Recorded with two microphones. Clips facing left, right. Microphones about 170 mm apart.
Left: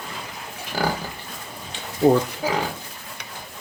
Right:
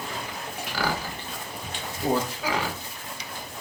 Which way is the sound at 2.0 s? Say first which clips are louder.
Left 9 dB; 65° left (ahead or behind).